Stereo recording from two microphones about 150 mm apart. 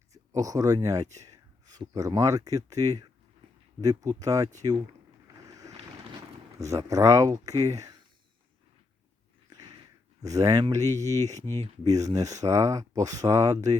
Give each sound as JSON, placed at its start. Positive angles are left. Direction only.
{"t": 0.1, "sound": "speech", "side_deg": -25}
{"t": 6.6, "sound": "speech", "side_deg": -20}
{"t": 9.5, "sound": "a sound", "side_deg": -25}
{"t": 10.2, "sound": "speech", "side_deg": -25}